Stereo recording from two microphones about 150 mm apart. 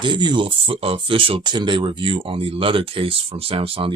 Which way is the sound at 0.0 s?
30° right (ahead or behind).